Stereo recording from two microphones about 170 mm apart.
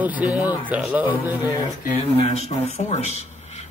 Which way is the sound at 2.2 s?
40° left (ahead or behind).